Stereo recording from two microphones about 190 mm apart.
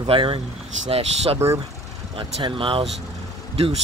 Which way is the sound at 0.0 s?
30° right (ahead or behind).